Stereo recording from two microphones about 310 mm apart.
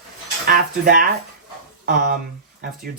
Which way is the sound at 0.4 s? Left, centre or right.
Right.